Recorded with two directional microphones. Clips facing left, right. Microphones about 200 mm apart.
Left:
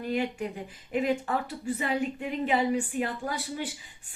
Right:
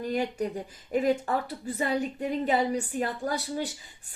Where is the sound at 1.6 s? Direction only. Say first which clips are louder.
Left 1 dB; 40° right (ahead or behind).